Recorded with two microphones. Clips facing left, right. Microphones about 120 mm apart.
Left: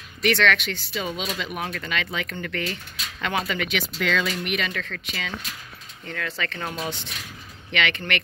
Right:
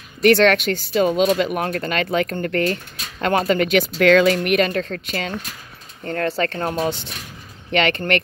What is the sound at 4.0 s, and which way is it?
Speech, 60° right (ahead or behind).